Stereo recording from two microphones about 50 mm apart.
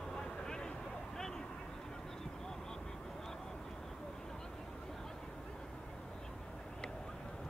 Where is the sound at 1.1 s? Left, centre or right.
Centre.